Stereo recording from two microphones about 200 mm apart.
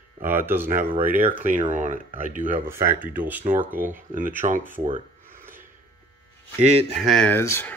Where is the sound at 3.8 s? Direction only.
40° right (ahead or behind).